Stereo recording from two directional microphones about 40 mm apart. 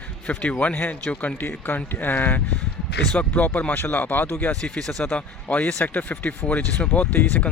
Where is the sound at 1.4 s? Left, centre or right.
Left.